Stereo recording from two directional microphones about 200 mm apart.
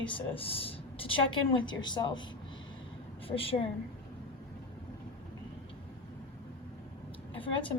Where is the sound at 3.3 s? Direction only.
30° left (ahead or behind).